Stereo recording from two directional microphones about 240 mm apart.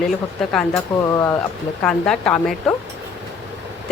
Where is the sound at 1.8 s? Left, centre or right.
Centre.